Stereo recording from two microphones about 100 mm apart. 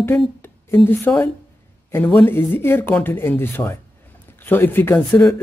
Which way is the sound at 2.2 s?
20° left (ahead or behind).